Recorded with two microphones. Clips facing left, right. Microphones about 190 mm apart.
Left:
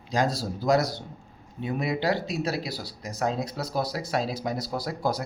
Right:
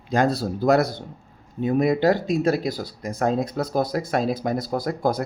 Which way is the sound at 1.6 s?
45° right (ahead or behind).